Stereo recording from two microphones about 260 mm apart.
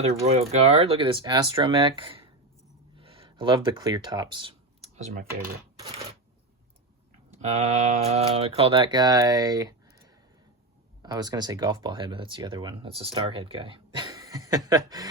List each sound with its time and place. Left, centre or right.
0.0 s speech: right
2.9 s a sound: right
7.5 s speech: right
11.0 s speech: centre